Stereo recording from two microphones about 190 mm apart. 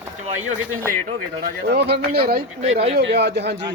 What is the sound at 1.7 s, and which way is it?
Speech, 60° right (ahead or behind).